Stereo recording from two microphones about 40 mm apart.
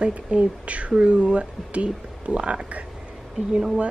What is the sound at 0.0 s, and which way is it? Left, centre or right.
Speech, right.